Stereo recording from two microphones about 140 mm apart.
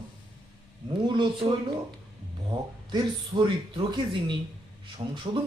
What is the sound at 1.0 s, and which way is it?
Speech, 35° right (ahead or behind).